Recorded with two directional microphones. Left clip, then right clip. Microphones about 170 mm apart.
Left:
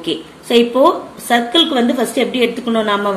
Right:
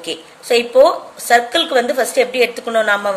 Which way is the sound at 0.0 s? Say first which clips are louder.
Left 4 dB; 40° right (ahead or behind).